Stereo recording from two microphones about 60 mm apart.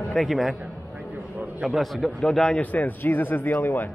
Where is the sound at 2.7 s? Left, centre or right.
Left.